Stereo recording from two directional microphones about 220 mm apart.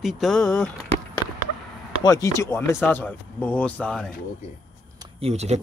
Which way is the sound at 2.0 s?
15° left (ahead or behind).